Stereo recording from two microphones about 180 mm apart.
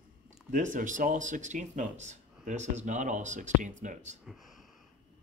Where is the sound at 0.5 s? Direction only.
45° right (ahead or behind).